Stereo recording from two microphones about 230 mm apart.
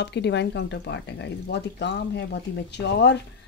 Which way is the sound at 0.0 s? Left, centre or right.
Left.